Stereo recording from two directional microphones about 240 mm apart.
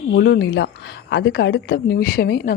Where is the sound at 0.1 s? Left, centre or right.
Left.